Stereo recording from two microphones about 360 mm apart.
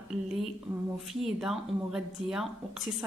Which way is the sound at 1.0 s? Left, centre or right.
Centre.